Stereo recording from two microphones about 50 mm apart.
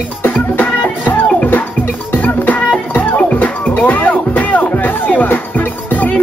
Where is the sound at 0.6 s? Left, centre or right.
Left.